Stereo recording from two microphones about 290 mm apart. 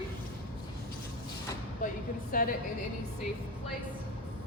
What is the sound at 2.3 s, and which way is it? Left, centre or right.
Speech, left.